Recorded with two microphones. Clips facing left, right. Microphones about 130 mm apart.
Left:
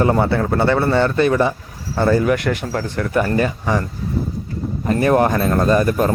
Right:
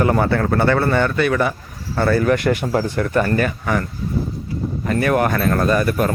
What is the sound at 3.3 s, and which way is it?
Speech, 25° left (ahead or behind).